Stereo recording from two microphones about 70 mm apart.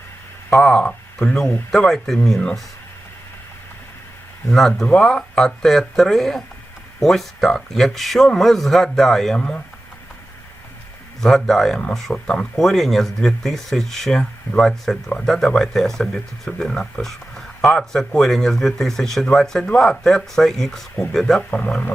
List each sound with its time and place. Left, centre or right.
0.5 s speech: centre
0.8 s speech: centre
1.7 s speech: centre
4.5 s speech: centre
11.2 s speech: centre
21.5 s speech: centre